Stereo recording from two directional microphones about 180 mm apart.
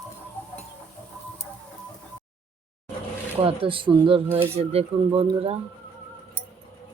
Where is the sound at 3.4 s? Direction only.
30° right (ahead or behind).